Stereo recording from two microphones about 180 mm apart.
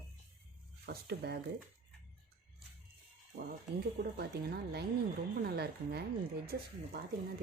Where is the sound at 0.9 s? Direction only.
65° right (ahead or behind).